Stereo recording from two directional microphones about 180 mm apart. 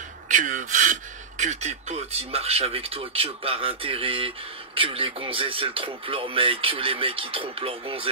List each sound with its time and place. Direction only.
0.3 s speech: 45° right (ahead or behind)